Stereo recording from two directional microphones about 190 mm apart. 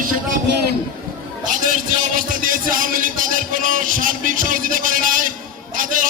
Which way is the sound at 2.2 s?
45° right (ahead or behind).